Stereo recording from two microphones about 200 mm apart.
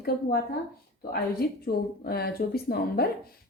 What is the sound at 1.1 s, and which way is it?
Speech, 50° left (ahead or behind).